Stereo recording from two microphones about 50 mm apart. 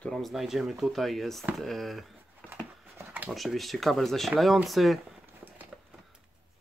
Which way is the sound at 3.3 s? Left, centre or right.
Centre.